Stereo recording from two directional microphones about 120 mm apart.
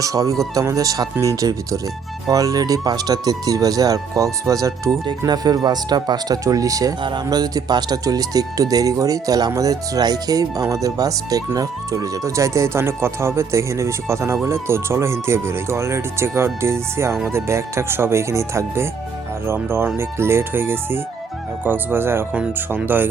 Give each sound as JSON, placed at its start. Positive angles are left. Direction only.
{"t": 0.0, "sound": "speech", "side_deg": -30}